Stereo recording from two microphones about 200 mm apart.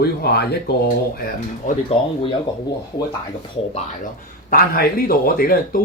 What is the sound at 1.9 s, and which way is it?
Speech, 25° left (ahead or behind).